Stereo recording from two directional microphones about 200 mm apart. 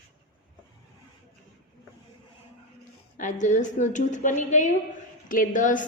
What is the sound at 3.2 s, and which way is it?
A woman's voice, 40° left (ahead or behind).